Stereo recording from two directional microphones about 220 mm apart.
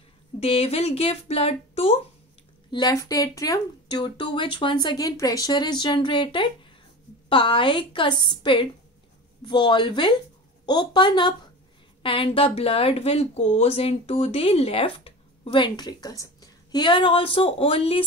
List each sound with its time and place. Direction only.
0.4 s speech: 25° left (ahead or behind)